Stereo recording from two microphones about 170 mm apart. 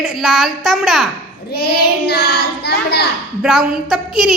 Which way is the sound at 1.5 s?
70° left (ahead or behind).